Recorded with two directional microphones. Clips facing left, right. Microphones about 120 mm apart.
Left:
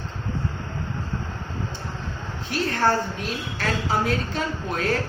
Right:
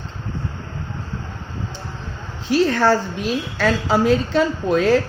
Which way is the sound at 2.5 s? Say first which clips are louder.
Right 7 dB; 90° right.